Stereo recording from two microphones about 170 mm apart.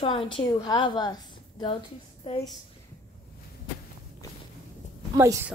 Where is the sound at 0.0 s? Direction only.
30° left (ahead or behind).